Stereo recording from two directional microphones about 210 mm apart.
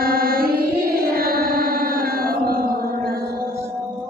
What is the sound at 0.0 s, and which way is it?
Music, 45° right (ahead or behind).